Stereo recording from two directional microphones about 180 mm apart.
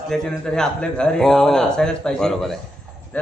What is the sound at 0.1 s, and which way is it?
A man's voice, 5° left (ahead or behind).